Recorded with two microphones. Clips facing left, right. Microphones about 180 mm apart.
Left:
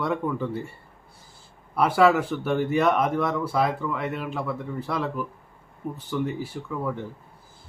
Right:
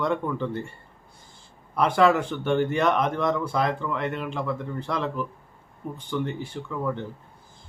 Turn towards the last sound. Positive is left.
turn(degrees=5)  # may be behind; listen again after turning